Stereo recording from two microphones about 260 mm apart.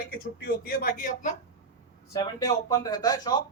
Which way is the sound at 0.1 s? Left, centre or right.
Left.